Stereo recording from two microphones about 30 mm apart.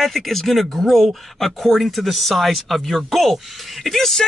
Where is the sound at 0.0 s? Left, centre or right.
Centre.